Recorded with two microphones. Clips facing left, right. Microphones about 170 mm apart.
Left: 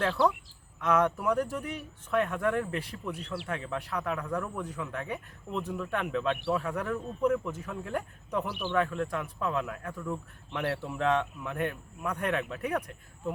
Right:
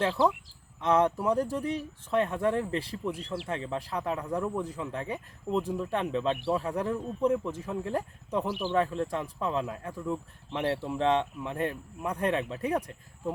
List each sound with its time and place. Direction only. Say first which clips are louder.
0.8 s speech: right 2 dB; 30° right (ahead or behind)